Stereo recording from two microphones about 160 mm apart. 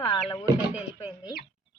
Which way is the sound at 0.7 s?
10° right (ahead or behind).